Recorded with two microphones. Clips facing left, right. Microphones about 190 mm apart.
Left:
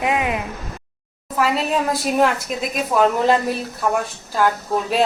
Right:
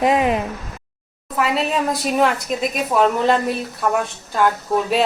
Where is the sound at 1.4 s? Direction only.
Centre (ahead or behind).